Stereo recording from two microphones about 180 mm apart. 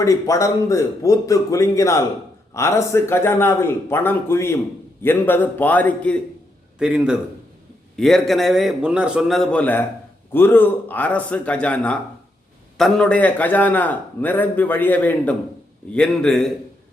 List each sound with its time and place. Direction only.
0.0 s a man's voice: 15° left (ahead or behind)
6.7 s a man's voice: 5° right (ahead or behind)